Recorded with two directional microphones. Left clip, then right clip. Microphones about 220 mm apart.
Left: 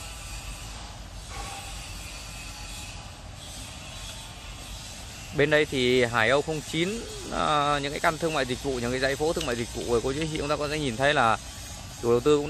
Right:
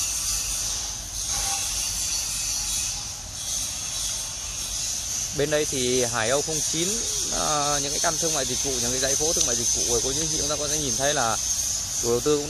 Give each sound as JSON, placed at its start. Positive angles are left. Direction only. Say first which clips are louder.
{"t": 5.4, "sound": "speech", "louder": "left 2 dB", "side_deg": 15}